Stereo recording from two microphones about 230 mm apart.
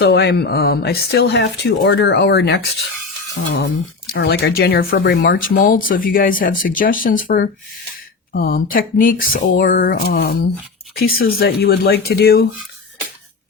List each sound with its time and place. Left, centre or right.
0.0 s speech: left
4.1 s speech: left